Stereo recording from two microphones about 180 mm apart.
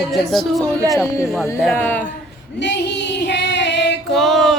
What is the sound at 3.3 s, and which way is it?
Female singing, 75° left (ahead or behind).